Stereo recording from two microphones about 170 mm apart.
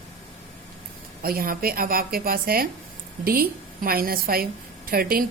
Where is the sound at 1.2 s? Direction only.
60° right (ahead or behind).